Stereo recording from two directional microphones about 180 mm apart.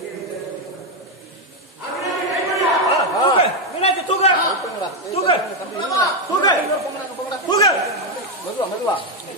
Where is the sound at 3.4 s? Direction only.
35° left (ahead or behind).